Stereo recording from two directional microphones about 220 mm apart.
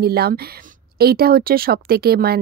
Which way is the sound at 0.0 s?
45° right (ahead or behind).